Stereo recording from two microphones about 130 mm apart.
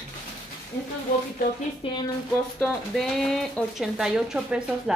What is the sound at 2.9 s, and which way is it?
Speech, centre (ahead or behind).